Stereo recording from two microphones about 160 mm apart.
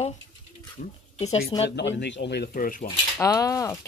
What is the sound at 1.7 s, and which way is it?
Speech, 90° left.